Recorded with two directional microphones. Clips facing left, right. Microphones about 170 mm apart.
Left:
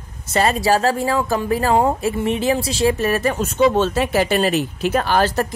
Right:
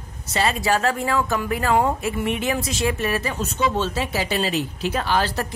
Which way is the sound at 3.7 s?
55° left (ahead or behind).